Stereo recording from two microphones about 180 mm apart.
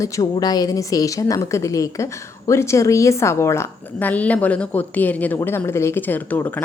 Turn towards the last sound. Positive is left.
turn(degrees=10)  # may be behind; listen again after turning